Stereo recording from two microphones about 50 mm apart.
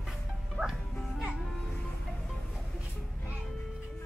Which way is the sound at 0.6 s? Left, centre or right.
Left.